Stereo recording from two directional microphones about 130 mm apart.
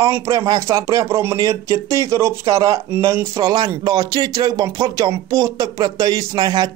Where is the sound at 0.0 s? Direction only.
25° right (ahead or behind).